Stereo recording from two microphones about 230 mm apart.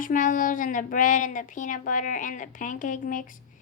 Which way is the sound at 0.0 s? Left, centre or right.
Left.